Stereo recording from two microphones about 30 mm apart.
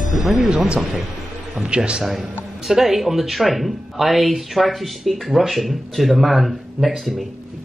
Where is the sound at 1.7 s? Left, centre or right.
Right.